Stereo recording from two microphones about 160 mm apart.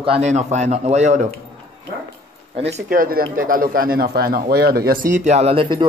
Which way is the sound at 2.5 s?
40° right (ahead or behind).